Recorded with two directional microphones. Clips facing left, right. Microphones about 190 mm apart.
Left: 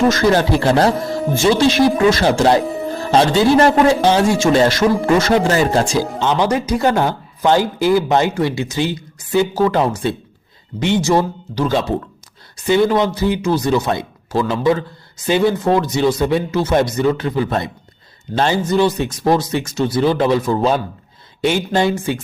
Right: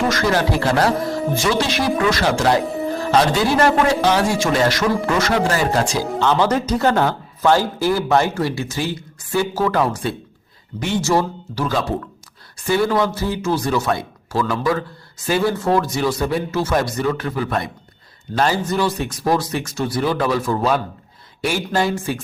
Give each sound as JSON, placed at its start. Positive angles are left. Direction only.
{"t": 0.1, "sound": "speech", "side_deg": 25}